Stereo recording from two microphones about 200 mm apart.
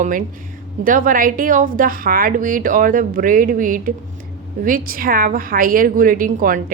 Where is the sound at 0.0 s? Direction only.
40° right (ahead or behind).